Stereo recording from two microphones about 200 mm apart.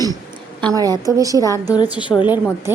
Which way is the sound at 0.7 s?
20° right (ahead or behind).